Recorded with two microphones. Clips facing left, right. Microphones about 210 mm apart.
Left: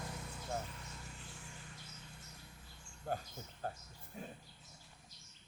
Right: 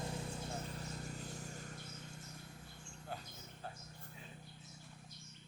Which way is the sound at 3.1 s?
45° left (ahead or behind).